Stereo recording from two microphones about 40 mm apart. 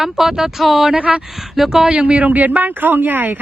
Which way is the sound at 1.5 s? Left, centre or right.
Centre.